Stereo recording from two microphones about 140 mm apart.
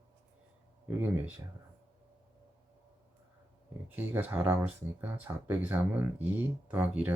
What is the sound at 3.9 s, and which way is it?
Speech, 15° right (ahead or behind).